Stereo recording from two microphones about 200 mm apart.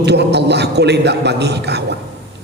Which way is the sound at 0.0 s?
55° right (ahead or behind).